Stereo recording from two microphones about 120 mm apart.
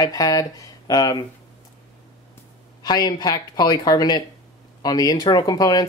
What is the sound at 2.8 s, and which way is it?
Speech, 35° left (ahead or behind).